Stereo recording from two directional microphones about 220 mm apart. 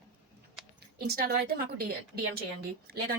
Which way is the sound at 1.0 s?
45° right (ahead or behind).